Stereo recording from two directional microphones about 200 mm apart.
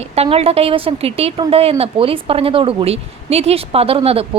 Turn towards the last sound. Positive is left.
turn(degrees=-30)  # may be behind; listen again after turning